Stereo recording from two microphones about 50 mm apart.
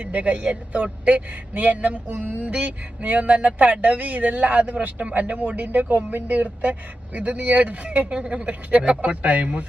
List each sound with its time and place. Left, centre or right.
0.0 s speech: right
2.0 s music: right
2.4 s speech: right